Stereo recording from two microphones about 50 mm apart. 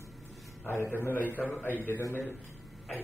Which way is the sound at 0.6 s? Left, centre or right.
Left.